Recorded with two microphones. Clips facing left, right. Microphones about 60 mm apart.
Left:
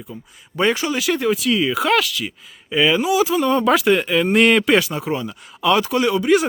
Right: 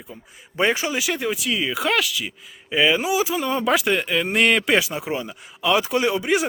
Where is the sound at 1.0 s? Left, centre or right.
Centre.